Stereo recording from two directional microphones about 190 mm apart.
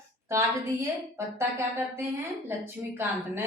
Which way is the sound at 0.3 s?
15° right (ahead or behind).